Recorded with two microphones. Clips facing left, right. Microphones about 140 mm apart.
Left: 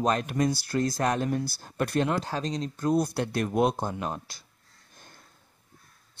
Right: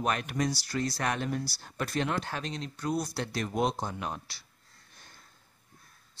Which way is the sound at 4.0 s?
45° left (ahead or behind).